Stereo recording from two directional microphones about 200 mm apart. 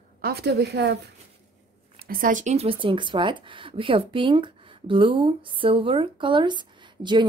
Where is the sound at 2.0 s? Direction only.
45° right (ahead or behind).